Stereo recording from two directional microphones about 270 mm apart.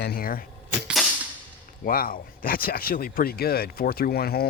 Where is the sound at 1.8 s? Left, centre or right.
Left.